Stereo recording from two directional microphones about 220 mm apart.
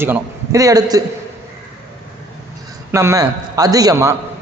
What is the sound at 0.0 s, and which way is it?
A man's voice, 15° right (ahead or behind).